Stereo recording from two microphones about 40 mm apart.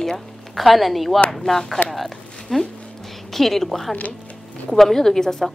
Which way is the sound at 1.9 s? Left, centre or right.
Centre.